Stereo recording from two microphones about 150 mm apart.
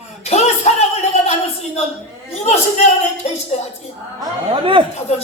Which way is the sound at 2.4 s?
45° left (ahead or behind).